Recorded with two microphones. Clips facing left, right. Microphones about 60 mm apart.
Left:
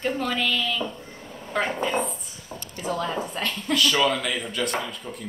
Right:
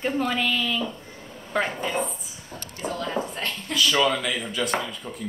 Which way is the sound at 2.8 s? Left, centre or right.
Right.